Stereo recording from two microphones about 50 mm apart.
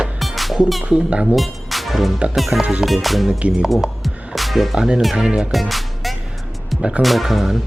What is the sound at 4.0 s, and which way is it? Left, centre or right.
Music, centre.